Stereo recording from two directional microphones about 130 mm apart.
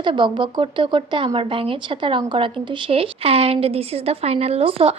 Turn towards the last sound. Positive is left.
turn(degrees=-45)  # may be behind; listen again after turning